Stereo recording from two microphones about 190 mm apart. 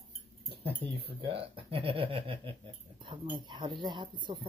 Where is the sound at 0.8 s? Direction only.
30° right (ahead or behind).